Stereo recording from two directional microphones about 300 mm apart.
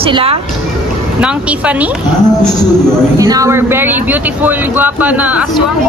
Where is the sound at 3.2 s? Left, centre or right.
Centre.